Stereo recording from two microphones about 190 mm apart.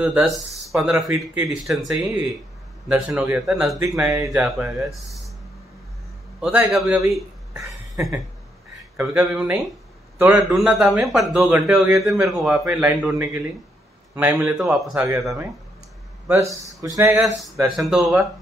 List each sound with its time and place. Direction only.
0.0 s a man's voice: 5° right (ahead or behind)
6.4 s a man's voice: 5° right (ahead or behind)
7.9 s a sound: 20° right (ahead or behind)
8.9 s a man's voice: 10° right (ahead or behind)
16.3 s a man's voice: 15° right (ahead or behind)
17.4 s a man's voice: centre (ahead or behind)